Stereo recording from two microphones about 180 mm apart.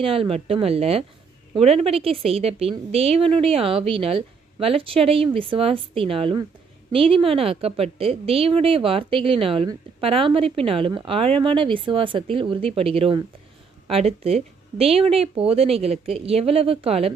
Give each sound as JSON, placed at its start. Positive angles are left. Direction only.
{"t": 0.0, "sound": "a woman's voice", "side_deg": -30}